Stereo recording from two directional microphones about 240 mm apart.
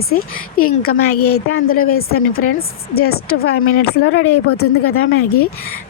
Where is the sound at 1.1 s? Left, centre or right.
Left.